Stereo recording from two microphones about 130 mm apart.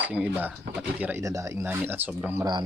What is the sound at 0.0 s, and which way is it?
Speech, 10° right (ahead or behind).